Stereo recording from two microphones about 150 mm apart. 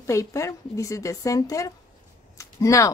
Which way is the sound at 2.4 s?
20° left (ahead or behind).